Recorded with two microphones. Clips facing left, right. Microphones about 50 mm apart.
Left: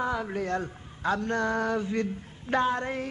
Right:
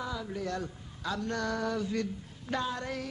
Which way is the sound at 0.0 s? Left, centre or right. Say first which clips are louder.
Left 6 dB; left.